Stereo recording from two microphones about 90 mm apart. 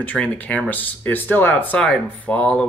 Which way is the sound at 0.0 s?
15° left (ahead or behind).